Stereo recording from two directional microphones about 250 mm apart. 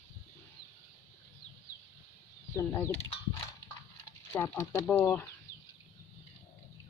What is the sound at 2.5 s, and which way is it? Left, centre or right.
Speech, centre.